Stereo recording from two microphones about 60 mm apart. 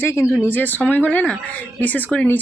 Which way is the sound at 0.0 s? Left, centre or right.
Left.